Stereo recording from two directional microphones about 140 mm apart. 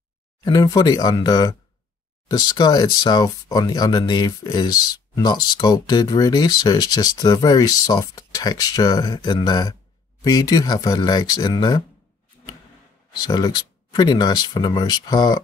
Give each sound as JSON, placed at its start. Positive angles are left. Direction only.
{"t": 0.4, "sound": "speech", "side_deg": 30}
{"t": 13.1, "sound": "speech", "side_deg": 30}